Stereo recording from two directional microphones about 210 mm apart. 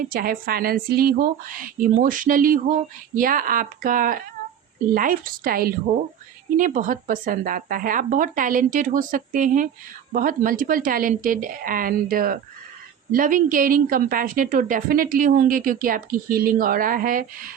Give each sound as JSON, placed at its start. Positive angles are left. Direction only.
{"t": 0.1, "sound": "a woman's voice", "side_deg": -45}